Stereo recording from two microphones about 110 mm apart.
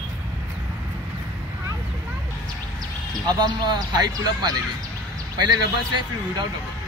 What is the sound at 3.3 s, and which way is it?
Speech, 40° right (ahead or behind).